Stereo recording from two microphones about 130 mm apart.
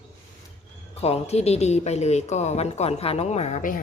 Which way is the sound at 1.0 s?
55° left (ahead or behind).